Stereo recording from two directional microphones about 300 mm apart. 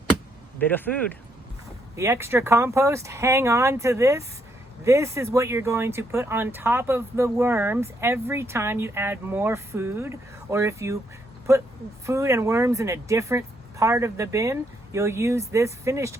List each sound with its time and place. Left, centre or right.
0.6 s speech: centre
2.0 s speech: centre
12.0 s speech: centre